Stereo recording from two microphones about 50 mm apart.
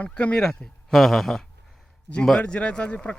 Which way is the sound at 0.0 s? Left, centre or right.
Left.